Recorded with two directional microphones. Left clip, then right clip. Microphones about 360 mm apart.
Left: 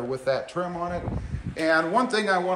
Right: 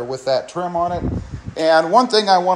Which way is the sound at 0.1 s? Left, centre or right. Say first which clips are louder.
Right 7 dB; centre.